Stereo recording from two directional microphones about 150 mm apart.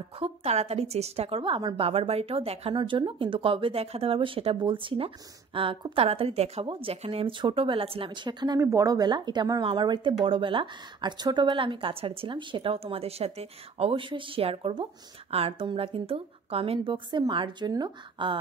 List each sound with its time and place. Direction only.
0.2 s a woman's voice: 45° right (ahead or behind)
2.7 s speech: 30° right (ahead or behind)